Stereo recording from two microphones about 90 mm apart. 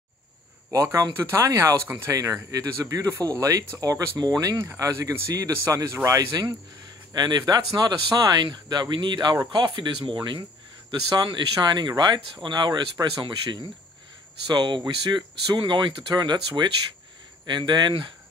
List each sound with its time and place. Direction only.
0.7 s speech: 35° right (ahead or behind)
2.1 s speech: 40° right (ahead or behind); by 18.1 s 60° right (ahead or behind)